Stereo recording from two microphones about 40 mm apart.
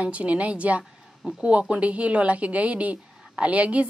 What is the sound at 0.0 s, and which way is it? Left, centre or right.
Speech, right.